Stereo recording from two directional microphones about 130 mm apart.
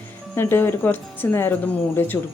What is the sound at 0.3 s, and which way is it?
A woman's voice, 15° left (ahead or behind).